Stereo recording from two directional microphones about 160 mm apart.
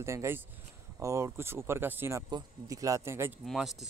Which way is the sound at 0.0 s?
15° right (ahead or behind).